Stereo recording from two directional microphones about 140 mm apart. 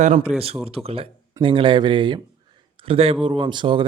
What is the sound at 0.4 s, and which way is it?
Speech, 45° right (ahead or behind).